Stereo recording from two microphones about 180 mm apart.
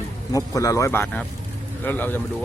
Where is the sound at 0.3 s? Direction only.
20° left (ahead or behind).